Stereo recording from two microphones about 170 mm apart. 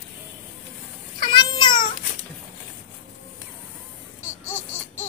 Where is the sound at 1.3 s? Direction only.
25° left (ahead or behind).